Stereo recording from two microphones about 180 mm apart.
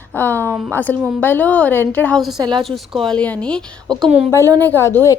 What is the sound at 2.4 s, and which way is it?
Speech, 25° right (ahead or behind).